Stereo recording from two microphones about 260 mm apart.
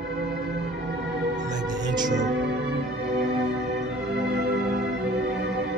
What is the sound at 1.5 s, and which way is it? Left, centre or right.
Music, centre.